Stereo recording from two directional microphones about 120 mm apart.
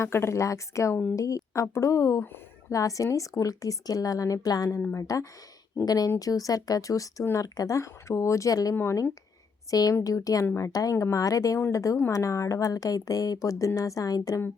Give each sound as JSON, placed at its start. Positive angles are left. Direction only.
{"t": 0.0, "sound": "speech", "side_deg": 20}